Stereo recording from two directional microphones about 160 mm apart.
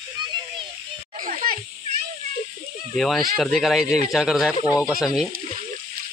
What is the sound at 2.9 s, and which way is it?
Speech, centre (ahead or behind).